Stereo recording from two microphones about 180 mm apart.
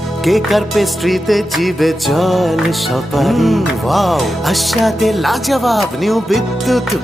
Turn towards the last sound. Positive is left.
turn(degrees=0)  # may be behind; listen again after turning